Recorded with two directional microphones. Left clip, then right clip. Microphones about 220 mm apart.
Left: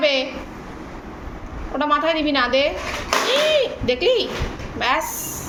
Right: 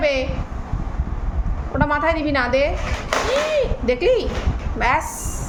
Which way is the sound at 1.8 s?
35° right (ahead or behind).